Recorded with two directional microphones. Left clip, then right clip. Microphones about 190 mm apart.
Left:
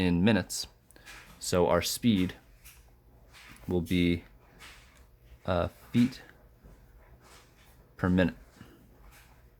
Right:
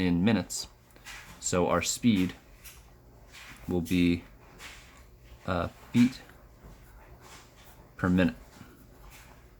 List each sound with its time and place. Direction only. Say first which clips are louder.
0.0 s speech: left 1 dB; 40° left (ahead or behind)
3.7 s speech: right 1 dB; 35° left (ahead or behind)
5.5 s speech: left 2 dB; 35° left (ahead or behind)
7.9 s speech: right 1 dB; 35° left (ahead or behind)